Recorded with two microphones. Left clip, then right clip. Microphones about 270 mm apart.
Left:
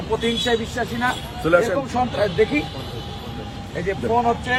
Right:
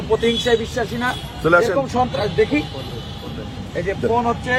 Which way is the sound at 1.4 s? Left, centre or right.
Centre.